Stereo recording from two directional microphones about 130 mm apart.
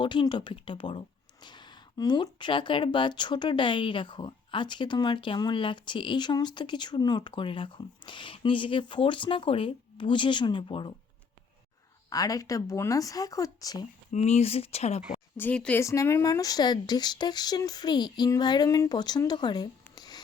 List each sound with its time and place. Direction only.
0.0 s speech: 40° left (ahead or behind)
12.1 s speech: 25° left (ahead or behind)
14.1 s speech: 60° left (ahead or behind)
15.4 s speech: 10° left (ahead or behind)
15.8 s speech: 25° left (ahead or behind)